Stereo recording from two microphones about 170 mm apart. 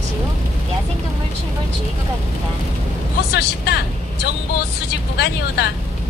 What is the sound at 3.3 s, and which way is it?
Vehicle, 75° left (ahead or behind).